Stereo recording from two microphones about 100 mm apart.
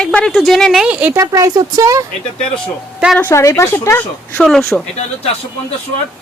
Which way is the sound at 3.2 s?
25° left (ahead or behind).